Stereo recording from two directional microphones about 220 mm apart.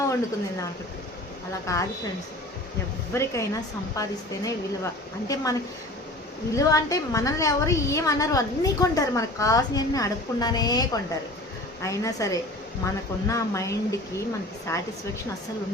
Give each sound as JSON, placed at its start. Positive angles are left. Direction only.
{"t": 1.6, "sound": "a woman's voice", "side_deg": 15}
{"t": 3.1, "sound": "a woman's voice", "side_deg": 15}